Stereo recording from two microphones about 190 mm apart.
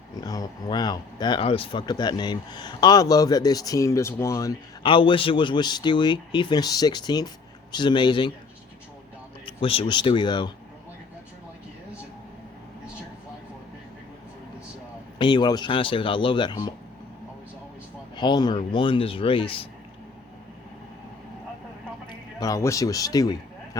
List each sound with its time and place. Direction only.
0.2 s speech: 20° left (ahead or behind)
9.5 s speech: 30° left (ahead or behind)
15.2 s speech: 25° left (ahead or behind)
18.2 s speech: 25° left (ahead or behind)
22.0 s speech: 20° left (ahead or behind)